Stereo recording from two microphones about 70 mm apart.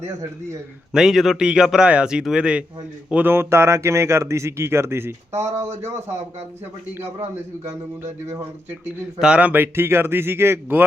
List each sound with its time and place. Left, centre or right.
0.9 s a man's voice: centre
3.2 s speech: right
9.1 s a man's voice: centre
9.6 s speech: right